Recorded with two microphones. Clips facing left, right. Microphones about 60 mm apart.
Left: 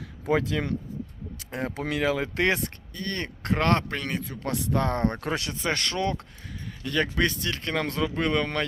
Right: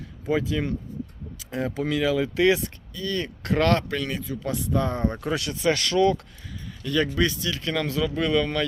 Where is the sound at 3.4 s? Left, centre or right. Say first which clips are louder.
Right 2 dB; left.